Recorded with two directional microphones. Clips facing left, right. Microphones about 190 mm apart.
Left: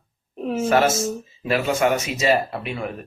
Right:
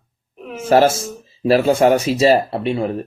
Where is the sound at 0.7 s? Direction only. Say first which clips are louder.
Right 7 dB; 30° right (ahead or behind).